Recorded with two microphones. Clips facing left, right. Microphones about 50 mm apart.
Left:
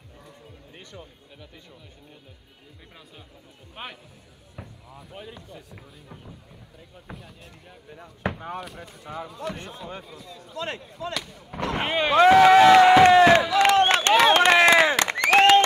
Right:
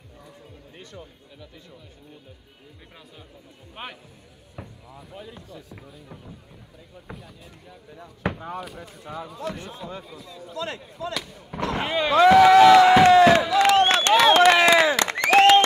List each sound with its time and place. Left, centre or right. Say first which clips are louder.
3.8 s speech: right 1 dB; centre
4.6 s a sound: right 2 dB; centre
5.1 s speech: even; left
8.3 s speech: right 1 dB; left
8.5 s speech: right 1 dB; centre
11.6 s a sound: even; left
13.3 s crowd: even; left
13.7 s crowd: right 2 dB; left